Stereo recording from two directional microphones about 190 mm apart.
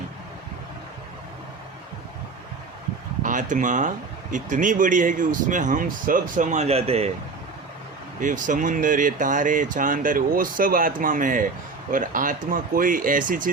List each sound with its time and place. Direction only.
3.2 s speech: 40° right (ahead or behind)
8.2 s speech: 45° right (ahead or behind)